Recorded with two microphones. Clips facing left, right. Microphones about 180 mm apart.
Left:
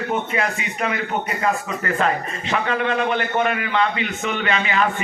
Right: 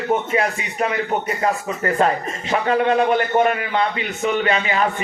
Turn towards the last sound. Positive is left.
turn(degrees=-35)  # may be behind; listen again after turning